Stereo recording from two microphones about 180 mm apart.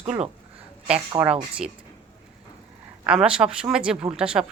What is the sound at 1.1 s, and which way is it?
Speech, 5° right (ahead or behind).